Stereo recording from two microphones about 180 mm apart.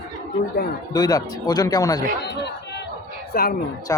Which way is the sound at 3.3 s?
55° left (ahead or behind).